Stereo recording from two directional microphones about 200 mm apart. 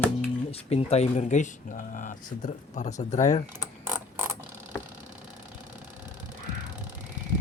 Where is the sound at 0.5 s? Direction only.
30° left (ahead or behind).